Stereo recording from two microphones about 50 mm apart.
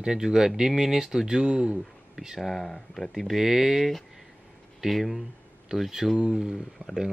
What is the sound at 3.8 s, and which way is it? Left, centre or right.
Speech, centre.